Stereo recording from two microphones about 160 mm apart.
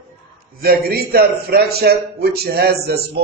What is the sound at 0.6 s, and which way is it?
A man's voice, 70° right (ahead or behind).